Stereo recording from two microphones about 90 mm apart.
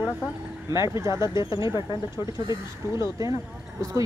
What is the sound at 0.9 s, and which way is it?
Speech, 35° right (ahead or behind).